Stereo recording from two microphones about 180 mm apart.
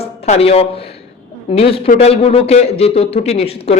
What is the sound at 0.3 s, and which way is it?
Speech, 35° left (ahead or behind).